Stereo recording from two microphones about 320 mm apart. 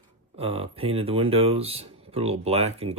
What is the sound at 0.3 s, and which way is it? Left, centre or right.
Speech, centre.